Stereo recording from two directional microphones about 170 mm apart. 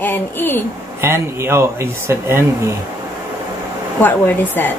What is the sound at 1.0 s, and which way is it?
Speech, 15° right (ahead or behind).